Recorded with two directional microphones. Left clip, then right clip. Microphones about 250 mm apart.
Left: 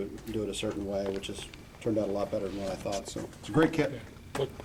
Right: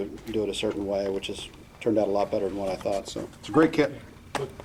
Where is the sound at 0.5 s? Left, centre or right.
Centre.